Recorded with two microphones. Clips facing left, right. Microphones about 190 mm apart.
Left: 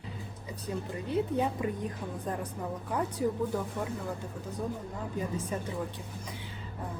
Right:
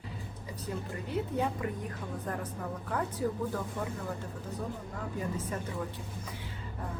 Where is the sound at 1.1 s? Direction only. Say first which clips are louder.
Left 3 dB; 20° left (ahead or behind).